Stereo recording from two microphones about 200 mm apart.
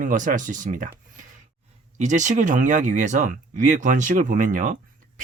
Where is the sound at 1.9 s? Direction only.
35° right (ahead or behind).